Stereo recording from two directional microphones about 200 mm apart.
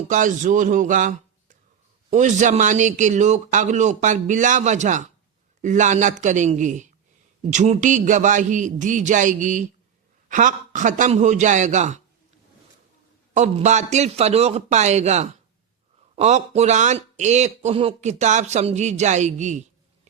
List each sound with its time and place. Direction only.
0.1 s speech: 40° right (ahead or behind)
13.3 s speech: 35° right (ahead or behind)